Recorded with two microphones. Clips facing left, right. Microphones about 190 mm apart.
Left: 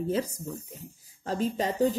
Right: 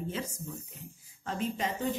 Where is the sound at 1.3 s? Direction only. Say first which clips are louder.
Left 5 dB; 35° left (ahead or behind).